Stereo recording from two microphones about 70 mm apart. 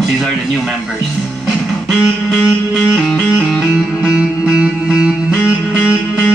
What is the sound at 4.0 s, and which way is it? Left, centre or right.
Music, centre.